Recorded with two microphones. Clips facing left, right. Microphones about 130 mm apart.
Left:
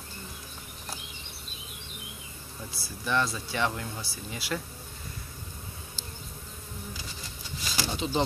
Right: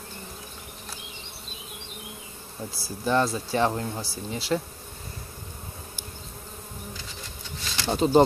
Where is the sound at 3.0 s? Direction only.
35° right (ahead or behind).